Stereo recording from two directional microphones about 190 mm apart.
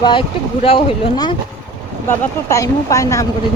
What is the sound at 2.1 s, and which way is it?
Speech, 15° left (ahead or behind).